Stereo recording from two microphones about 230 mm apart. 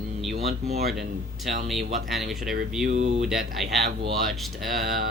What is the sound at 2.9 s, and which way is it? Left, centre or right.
Speech, right.